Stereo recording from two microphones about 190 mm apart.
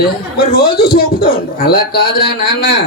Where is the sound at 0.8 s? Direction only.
50° left (ahead or behind).